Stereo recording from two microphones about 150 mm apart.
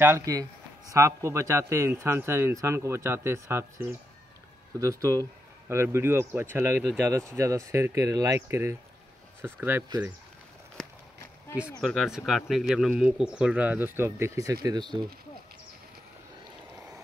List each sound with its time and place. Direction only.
0.0 s a man's voice: 20° right (ahead or behind)
11.8 s a man's voice: centre (ahead or behind); by 15.0 s 30° right (ahead or behind)